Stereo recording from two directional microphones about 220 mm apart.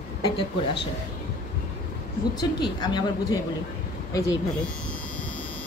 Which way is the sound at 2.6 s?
20° left (ahead or behind).